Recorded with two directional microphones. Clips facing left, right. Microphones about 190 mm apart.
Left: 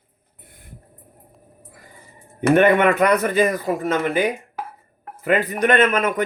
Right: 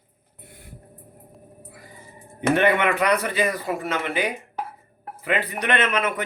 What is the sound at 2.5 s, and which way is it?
A man's voice, 45° left (ahead or behind).